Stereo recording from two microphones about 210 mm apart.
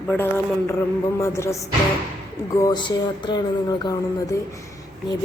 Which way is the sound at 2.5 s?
20° left (ahead or behind).